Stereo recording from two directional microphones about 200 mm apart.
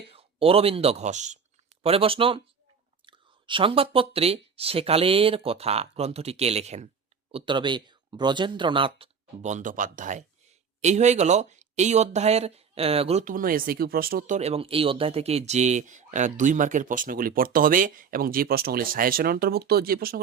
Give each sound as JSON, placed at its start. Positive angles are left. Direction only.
{"t": 0.1, "sound": "speech", "side_deg": -30}